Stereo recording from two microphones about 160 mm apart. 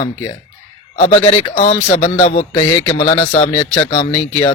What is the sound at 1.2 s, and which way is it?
Speech, 35° left (ahead or behind).